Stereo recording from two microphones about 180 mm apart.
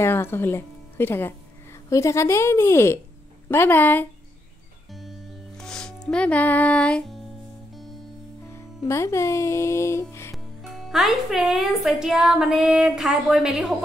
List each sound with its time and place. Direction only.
0.0 s speech: 15° left (ahead or behind)
5.6 s speech: 5° left (ahead or behind)
8.5 s speech: 15° left (ahead or behind)
10.3 s a woman's voice: centre (ahead or behind)